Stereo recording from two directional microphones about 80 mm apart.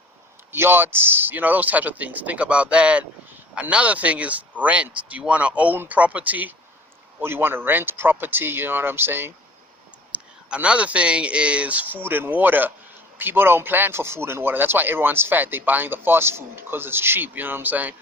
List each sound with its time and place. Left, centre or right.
0.5 s speech: right
10.1 s speech: centre